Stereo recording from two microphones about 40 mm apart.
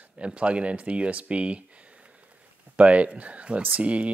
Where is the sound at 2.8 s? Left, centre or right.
Right.